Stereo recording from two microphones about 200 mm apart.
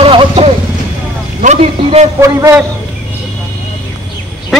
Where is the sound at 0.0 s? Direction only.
25° right (ahead or behind).